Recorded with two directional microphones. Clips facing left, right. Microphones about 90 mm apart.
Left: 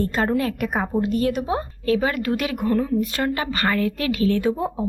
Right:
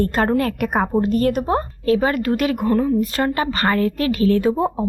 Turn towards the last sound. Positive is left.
turn(degrees=-40)  # may be behind; listen again after turning